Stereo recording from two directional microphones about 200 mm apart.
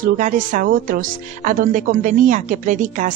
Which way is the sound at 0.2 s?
40° right (ahead or behind).